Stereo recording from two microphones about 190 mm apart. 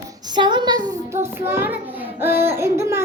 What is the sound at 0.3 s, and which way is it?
Child singing, 25° right (ahead or behind).